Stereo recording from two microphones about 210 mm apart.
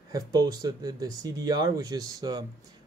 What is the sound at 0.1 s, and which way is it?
Speech, 20° right (ahead or behind).